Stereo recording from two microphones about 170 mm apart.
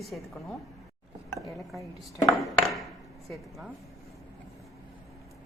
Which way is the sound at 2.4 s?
Centre (ahead or behind).